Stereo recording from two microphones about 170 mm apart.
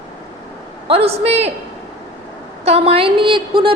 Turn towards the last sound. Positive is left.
turn(degrees=-30)  # may be behind; listen again after turning